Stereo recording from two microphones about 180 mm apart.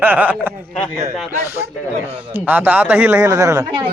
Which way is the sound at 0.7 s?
5° left (ahead or behind).